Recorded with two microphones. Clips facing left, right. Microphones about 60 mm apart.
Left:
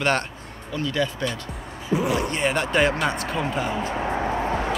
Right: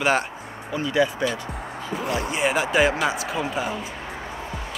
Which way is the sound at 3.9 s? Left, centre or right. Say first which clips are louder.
Left 9 dB; left.